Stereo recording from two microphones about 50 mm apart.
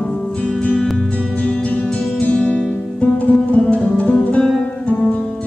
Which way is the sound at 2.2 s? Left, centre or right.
Left.